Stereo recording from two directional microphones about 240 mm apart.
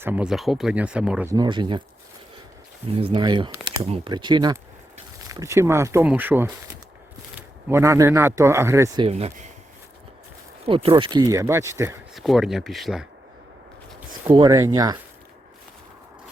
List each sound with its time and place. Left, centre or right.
0.0 s speech: centre
2.9 s speech: right
9.0 s speech: right
10.7 s speech: right
12.1 s speech: centre
14.3 s speech: centre